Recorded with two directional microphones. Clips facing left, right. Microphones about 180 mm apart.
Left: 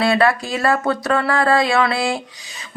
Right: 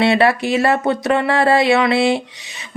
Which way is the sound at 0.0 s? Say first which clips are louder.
Right 2 dB; 25° right (ahead or behind).